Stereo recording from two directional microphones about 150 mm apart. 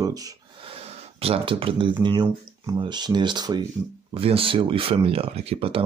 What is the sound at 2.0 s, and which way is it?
Speech, 30° right (ahead or behind).